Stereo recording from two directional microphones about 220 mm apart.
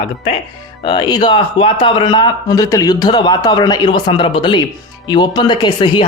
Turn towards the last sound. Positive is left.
turn(degrees=20)  # may be behind; listen again after turning